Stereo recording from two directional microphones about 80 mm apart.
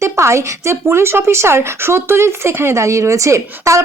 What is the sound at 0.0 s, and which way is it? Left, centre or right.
Speech, right.